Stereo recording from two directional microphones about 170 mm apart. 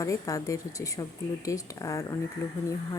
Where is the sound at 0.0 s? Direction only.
20° left (ahead or behind).